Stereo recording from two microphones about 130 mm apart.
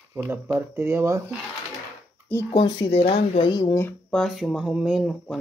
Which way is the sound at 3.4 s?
30° left (ahead or behind).